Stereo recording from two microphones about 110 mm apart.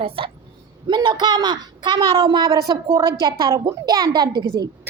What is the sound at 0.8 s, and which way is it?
Speech, 45° right (ahead or behind).